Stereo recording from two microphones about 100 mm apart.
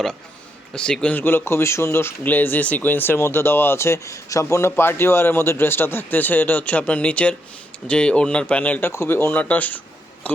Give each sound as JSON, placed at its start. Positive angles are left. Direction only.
{"t": 0.7, "sound": "speech", "side_deg": 10}
{"t": 8.9, "sound": "speech", "side_deg": 25}